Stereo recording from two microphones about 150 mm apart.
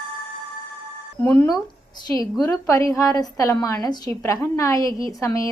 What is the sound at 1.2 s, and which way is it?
Speech, 15° left (ahead or behind).